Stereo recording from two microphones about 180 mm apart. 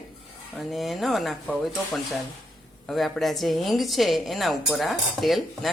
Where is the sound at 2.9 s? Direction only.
Centre (ahead or behind).